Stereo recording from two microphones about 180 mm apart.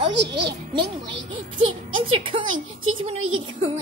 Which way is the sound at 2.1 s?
30° right (ahead or behind).